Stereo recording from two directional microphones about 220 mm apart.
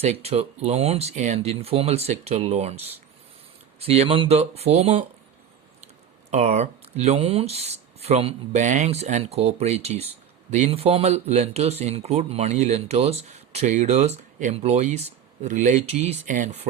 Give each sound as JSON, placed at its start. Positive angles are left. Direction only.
{"t": 0.0, "sound": "speech", "side_deg": -30}
{"t": 3.8, "sound": "speech", "side_deg": -25}
{"t": 6.3, "sound": "speech", "side_deg": -30}